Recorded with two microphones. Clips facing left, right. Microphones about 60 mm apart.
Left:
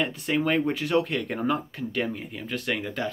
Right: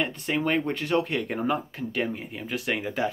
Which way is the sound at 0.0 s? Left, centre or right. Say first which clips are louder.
Left 1 dB; centre.